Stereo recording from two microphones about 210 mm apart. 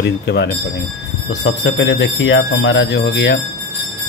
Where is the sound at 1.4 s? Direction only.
65° left (ahead or behind).